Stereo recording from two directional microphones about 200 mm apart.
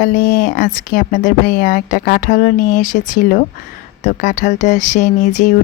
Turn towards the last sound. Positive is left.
turn(degrees=35)  # may be behind; listen again after turning